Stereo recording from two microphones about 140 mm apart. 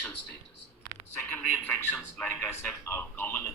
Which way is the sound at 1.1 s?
15° left (ahead or behind).